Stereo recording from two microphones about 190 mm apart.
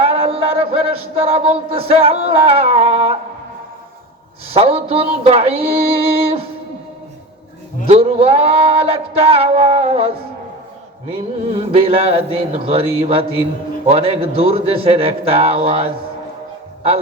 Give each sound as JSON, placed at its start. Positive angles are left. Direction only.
{"t": 0.0, "sound": "a sound", "side_deg": -30}
{"t": 4.5, "sound": "music", "side_deg": -30}
{"t": 7.9, "sound": "music", "side_deg": -30}
{"t": 11.7, "sound": "music", "side_deg": -30}